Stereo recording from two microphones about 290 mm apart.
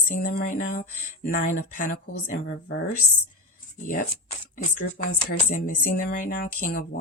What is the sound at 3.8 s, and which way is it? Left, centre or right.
Speech, left.